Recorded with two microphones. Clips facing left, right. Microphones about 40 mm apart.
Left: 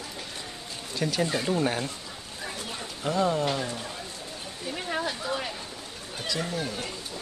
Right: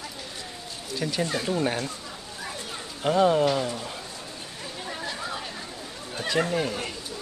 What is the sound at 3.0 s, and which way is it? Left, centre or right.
Speech, right.